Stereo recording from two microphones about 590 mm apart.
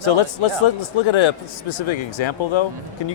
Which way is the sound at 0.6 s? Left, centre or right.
Left.